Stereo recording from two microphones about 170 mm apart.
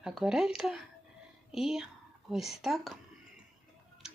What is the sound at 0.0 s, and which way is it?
Speech, centre (ahead or behind).